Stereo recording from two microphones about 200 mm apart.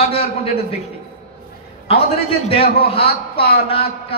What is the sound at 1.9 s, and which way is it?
A man's voice, 30° left (ahead or behind).